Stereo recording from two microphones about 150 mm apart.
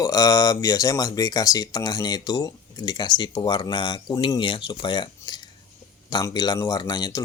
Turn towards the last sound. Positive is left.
turn(degrees=25)  # may be behind; listen again after turning